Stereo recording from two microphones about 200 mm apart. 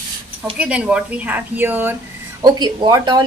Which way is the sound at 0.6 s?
5° right (ahead or behind).